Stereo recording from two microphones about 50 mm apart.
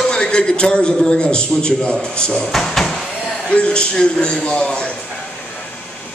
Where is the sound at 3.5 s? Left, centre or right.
Centre.